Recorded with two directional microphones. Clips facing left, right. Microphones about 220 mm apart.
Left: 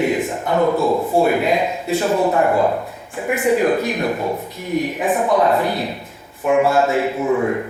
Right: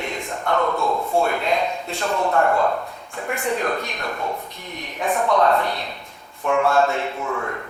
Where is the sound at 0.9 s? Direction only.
30° left (ahead or behind).